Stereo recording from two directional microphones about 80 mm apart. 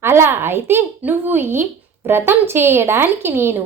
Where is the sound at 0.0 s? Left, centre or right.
Right.